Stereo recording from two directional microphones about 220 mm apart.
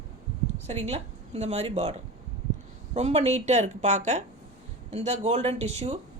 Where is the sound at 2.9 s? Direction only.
30° right (ahead or behind).